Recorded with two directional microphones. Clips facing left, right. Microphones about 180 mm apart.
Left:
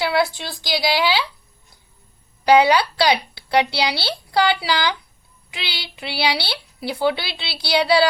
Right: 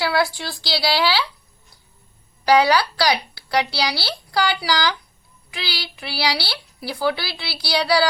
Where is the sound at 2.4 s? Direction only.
20° left (ahead or behind).